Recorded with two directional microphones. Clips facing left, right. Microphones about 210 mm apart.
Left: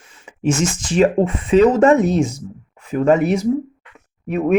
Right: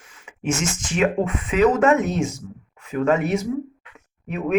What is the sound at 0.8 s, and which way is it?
Speech, 30° left (ahead or behind).